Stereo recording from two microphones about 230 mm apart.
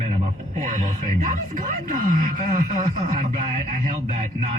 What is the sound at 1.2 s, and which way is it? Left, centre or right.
Speech, right.